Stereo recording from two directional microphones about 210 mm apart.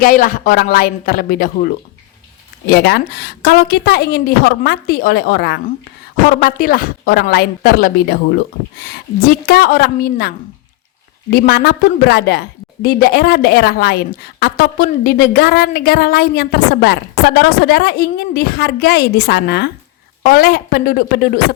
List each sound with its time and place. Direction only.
0.0 s a woman's voice: 40° left (ahead or behind)
2.6 s a woman's voice: 50° left (ahead or behind)